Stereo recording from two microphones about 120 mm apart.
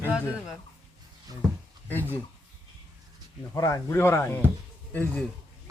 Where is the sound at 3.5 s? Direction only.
30° left (ahead or behind).